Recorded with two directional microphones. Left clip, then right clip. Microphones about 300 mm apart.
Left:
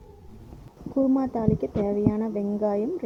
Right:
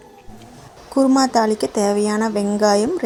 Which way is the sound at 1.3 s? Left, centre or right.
Left.